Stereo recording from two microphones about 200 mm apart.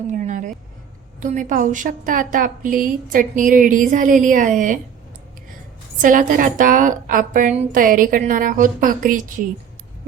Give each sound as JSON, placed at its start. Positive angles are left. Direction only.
{"t": 0.1, "sound": "a woman's voice", "side_deg": -40}
{"t": 6.0, "sound": "a woman's voice", "side_deg": -40}